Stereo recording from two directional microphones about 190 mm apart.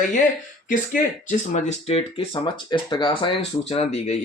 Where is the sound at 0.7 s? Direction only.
45° left (ahead or behind).